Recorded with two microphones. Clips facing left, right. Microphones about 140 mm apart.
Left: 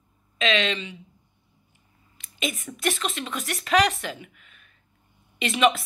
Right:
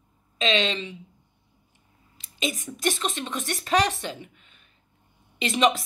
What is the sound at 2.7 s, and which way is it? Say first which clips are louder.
Speech: even; 35° right (ahead or behind).